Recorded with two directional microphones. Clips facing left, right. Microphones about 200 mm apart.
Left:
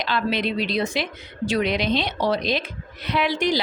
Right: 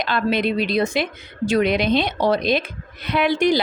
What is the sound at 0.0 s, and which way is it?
A woman's voice, 50° right (ahead or behind).